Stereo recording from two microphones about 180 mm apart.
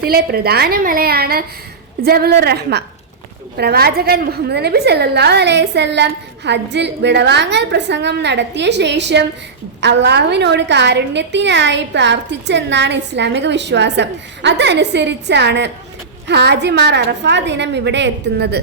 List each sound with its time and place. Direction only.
0.0 s a woman's voice: 60° right (ahead or behind)